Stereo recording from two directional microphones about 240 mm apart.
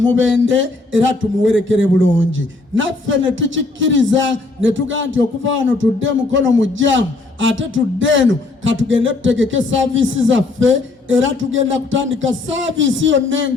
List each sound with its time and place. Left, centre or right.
0.4 s a man's voice: right